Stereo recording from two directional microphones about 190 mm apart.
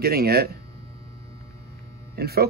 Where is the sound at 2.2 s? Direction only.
55° right (ahead or behind).